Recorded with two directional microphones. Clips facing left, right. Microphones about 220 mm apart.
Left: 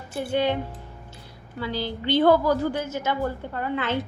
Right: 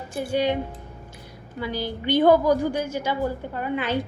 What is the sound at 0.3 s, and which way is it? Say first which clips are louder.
A woman's voice: right 1 dB; 15° right (ahead or behind).